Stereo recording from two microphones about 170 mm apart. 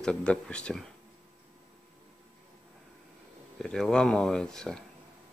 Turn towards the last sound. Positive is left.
turn(degrees=5)  # may be behind; listen again after turning